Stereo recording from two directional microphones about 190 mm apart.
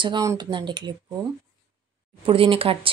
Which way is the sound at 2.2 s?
30° right (ahead or behind).